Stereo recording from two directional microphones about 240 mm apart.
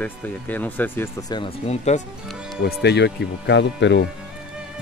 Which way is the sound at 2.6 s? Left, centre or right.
Left.